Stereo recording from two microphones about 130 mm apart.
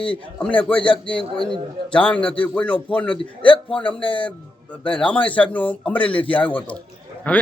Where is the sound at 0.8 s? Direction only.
40° left (ahead or behind).